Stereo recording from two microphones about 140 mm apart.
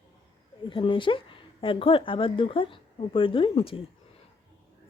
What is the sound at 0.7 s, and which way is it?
Speech, 35° left (ahead or behind).